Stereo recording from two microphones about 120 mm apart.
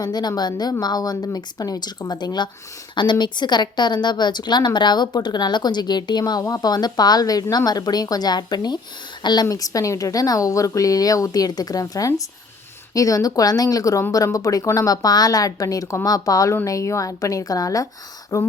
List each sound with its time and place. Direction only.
0.0 s a woman's voice: 35° left (ahead or behind)